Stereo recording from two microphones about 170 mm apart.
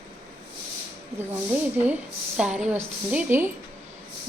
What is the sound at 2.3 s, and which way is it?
Speech, 5° right (ahead or behind).